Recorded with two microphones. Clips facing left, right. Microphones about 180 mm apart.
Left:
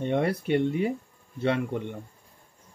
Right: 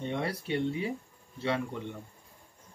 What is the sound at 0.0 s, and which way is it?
Speech, 55° left (ahead or behind).